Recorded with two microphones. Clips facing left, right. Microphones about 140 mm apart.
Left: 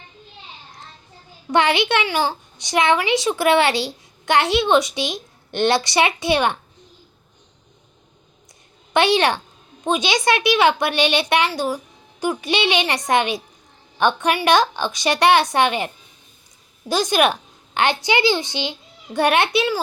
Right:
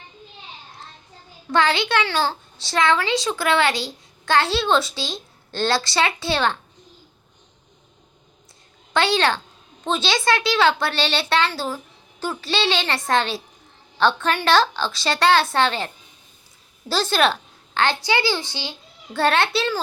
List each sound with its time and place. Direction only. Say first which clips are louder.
1.5 s a child's voice: left 2 dB; 20° left (ahead or behind)
8.9 s a child's voice: left 3 dB; 20° left (ahead or behind)
16.9 s a woman's voice: left 2 dB; 15° left (ahead or behind)